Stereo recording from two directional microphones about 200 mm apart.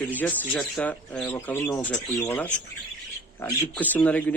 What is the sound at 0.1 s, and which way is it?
Speech, 10° left (ahead or behind).